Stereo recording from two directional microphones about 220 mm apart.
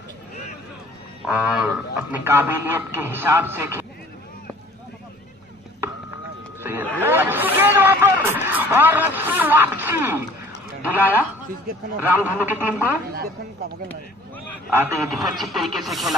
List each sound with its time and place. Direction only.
1.2 s speech: 5° right (ahead or behind)
6.6 s a sound: 10° right (ahead or behind)
11.0 s speech: 10° right (ahead or behind)
12.3 s speech: 10° right (ahead or behind)
13.1 s a woman's voice: 45° right (ahead or behind)
14.7 s a man's voice: 10° right (ahead or behind)